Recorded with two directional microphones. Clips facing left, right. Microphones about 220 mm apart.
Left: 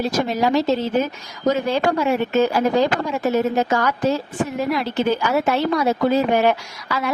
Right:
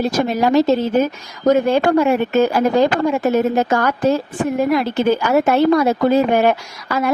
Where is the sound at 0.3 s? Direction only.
50° right (ahead or behind).